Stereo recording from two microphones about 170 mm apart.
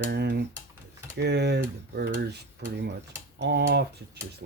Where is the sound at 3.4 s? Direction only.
80° right.